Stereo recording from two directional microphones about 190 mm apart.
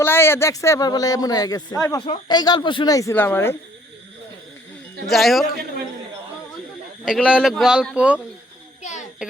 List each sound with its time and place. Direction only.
0.0 s speech: 10° left (ahead or behind)
5.0 s speech: centre (ahead or behind)
7.0 s speech: 5° right (ahead or behind)
8.8 s a sound: 40° left (ahead or behind)